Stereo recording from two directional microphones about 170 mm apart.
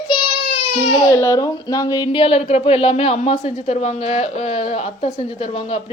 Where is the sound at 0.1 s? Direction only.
35° left (ahead or behind).